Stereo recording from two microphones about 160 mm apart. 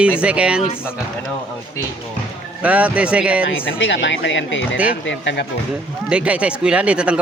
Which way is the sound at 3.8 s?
90° left.